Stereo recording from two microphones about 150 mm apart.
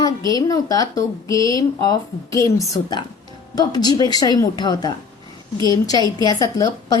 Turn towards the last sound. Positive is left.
turn(degrees=25)  # may be behind; listen again after turning